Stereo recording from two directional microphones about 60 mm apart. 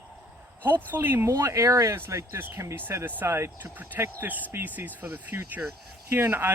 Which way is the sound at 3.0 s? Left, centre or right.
Right.